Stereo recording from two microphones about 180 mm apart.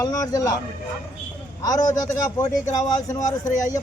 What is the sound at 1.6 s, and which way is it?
A man's voice, 20° left (ahead or behind).